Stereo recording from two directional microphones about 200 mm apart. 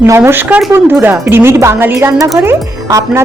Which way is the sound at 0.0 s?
10° right (ahead or behind).